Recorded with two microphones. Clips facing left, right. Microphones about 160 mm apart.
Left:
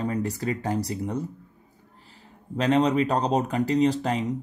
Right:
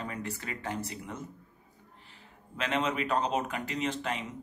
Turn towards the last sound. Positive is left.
turn(degrees=35)  # may be behind; listen again after turning